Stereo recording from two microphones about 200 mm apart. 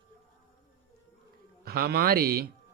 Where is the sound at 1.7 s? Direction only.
50° right (ahead or behind).